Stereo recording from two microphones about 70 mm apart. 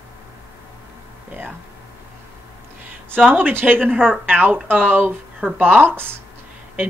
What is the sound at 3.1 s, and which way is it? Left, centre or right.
Speech, right.